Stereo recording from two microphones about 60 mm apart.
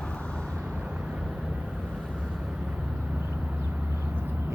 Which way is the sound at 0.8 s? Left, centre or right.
Centre.